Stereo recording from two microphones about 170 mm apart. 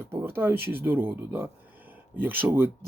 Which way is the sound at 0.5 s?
65° right (ahead or behind).